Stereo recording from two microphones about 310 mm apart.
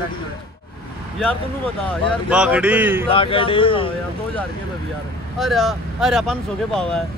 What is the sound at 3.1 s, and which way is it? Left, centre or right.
Speech, centre.